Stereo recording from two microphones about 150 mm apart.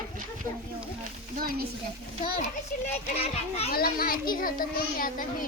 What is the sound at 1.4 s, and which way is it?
Speech, 75° right (ahead or behind).